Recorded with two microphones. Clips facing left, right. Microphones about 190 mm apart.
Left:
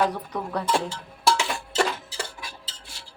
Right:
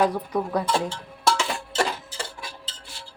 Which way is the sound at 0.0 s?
10° right (ahead or behind).